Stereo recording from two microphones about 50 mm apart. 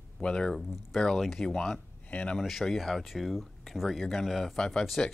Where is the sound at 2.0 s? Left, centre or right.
Left.